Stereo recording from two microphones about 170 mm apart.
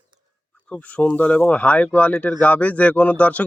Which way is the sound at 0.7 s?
10° left (ahead or behind).